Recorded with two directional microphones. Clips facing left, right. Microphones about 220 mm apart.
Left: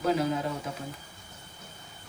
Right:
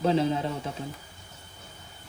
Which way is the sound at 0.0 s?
25° right (ahead or behind).